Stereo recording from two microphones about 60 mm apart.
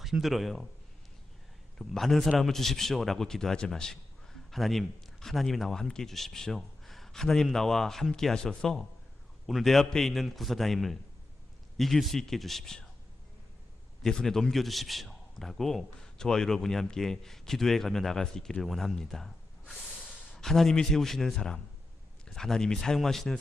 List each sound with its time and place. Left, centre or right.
0.0 s a man's voice: centre
1.8 s a man's voice: centre
14.0 s a man's voice: centre